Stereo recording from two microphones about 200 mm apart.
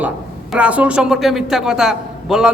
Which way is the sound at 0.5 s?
5° right (ahead or behind).